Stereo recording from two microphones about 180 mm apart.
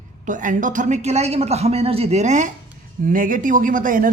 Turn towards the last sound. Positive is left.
turn(degrees=-50)  # may be behind; listen again after turning